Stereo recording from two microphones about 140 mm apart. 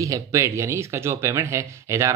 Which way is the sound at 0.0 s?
20° right (ahead or behind).